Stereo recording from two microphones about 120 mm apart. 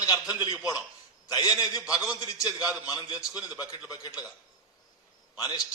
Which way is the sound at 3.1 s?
10° right (ahead or behind).